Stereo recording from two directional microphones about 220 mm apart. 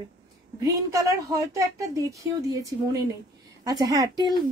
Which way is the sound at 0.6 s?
15° right (ahead or behind).